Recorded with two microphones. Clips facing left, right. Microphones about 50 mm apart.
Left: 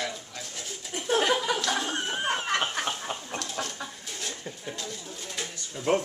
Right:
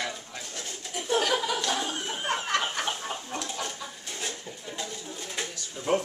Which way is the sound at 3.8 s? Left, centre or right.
Centre.